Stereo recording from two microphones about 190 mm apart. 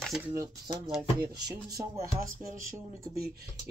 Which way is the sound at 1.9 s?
45° right (ahead or behind).